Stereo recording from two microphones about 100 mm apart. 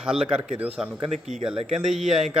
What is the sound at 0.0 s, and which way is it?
A man's voice, 10° right (ahead or behind).